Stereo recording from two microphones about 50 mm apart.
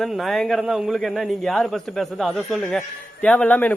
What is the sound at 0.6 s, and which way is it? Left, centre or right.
Speech, centre.